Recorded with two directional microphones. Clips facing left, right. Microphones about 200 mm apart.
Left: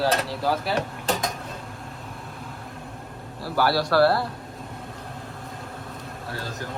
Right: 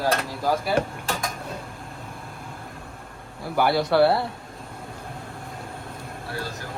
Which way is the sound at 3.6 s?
20° right (ahead or behind).